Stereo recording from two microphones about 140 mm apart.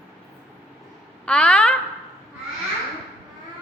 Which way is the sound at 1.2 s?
10° left (ahead or behind).